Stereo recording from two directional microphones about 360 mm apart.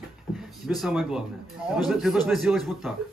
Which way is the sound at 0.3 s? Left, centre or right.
Centre.